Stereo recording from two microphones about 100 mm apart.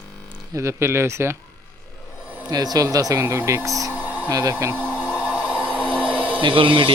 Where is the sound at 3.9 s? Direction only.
15° right (ahead or behind).